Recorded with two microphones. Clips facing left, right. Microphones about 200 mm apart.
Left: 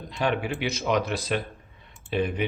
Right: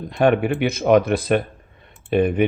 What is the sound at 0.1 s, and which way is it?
Speech, 55° right (ahead or behind).